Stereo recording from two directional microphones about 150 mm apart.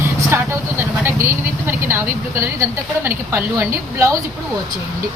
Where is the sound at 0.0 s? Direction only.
15° right (ahead or behind).